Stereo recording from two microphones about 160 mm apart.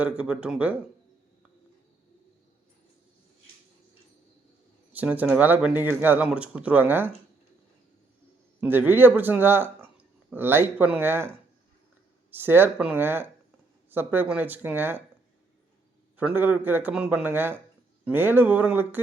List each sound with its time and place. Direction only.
0.0 s speech: 10° right (ahead or behind)
4.9 s speech: 10° right (ahead or behind)
8.6 s speech: 10° right (ahead or behind)
16.1 s speech: 10° right (ahead or behind)